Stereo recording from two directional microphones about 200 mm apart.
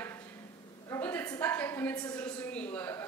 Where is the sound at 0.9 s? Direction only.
10° left (ahead or behind).